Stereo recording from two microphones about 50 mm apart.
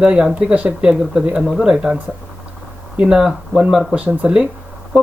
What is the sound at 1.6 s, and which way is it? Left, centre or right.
Speech, centre.